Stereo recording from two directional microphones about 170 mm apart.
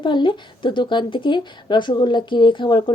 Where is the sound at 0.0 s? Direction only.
25° left (ahead or behind).